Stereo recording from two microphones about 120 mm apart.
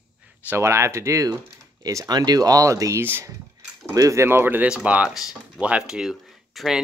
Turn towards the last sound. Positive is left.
turn(degrees=0)  # may be behind; listen again after turning